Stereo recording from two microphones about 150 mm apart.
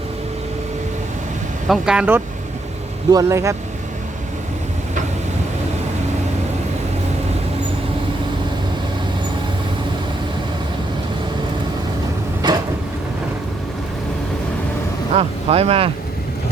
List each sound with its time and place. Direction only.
1.6 s speech: 5° right (ahead or behind)
3.1 s speech: 20° right (ahead or behind)
15.1 s speech: 40° right (ahead or behind)